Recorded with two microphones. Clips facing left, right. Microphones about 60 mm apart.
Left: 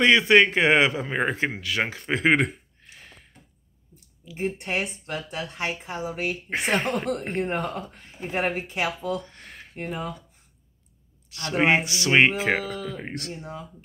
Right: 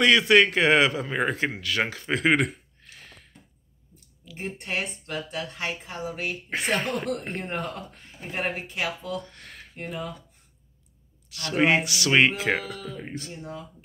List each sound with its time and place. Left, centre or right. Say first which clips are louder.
0.0 s speech: left 1 dB; left
4.3 s speech: left 4 dB; centre
11.2 s speech: left 1 dB; left
12.6 s speech: left 4 dB; left